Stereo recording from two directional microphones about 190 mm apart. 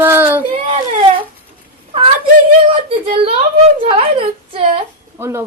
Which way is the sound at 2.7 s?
30° right (ahead or behind).